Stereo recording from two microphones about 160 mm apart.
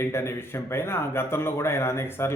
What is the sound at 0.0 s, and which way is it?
A man's voice, 15° left (ahead or behind).